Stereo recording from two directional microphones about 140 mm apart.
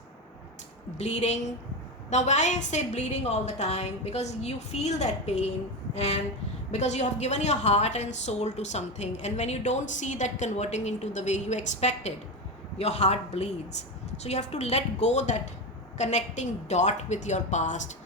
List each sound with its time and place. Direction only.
0.9 s a woman's voice: 50° left (ahead or behind)